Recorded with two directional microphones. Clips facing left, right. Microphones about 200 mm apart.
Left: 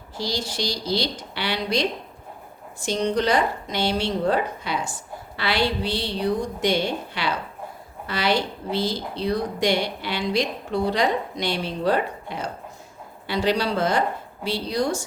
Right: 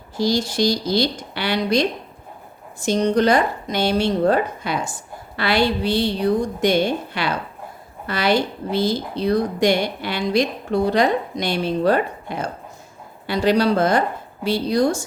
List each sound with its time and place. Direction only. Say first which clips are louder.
0.2 s a woman's voice: right 8 dB; 50° right (ahead or behind)
2.8 s a woman's voice: right 5 dB; 50° right (ahead or behind)